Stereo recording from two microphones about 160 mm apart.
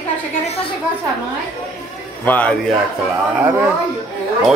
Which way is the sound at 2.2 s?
10° left (ahead or behind).